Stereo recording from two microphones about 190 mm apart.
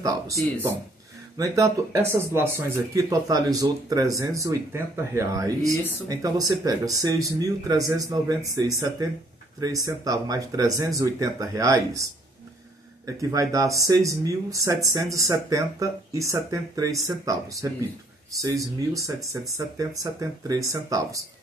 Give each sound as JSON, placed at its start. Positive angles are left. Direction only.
{"t": 1.4, "sound": "speech", "side_deg": -15}